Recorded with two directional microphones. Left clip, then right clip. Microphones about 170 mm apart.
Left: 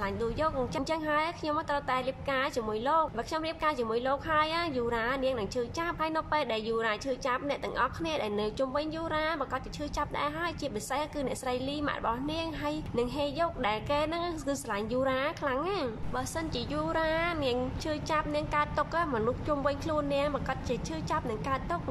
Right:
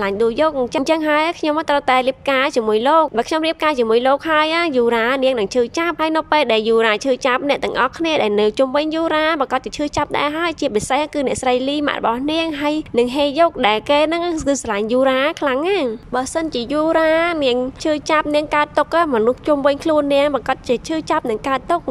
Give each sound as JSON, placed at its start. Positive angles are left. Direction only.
{"t": 0.0, "sound": "a woman's voice", "side_deg": -45}